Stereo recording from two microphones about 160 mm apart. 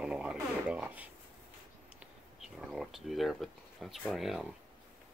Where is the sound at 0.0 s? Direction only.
5° right (ahead or behind).